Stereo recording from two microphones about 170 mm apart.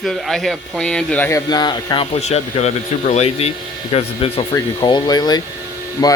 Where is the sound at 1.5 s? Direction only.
25° left (ahead or behind).